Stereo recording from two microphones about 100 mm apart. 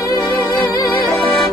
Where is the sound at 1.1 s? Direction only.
Centre (ahead or behind).